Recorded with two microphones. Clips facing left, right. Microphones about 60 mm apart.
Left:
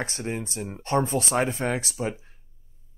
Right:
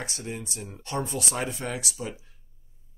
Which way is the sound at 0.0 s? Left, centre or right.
Left.